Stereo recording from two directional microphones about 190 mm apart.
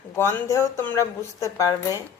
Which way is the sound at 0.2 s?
15° left (ahead or behind).